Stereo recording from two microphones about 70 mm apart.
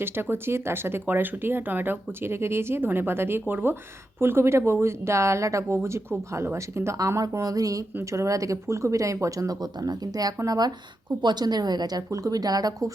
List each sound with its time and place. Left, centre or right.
0.0 s speech: right
7.2 s speech: right
9.6 s a woman's voice: right
11.2 s a woman's voice: right